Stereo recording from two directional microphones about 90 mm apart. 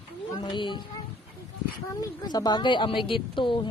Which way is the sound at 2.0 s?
50° left (ahead or behind).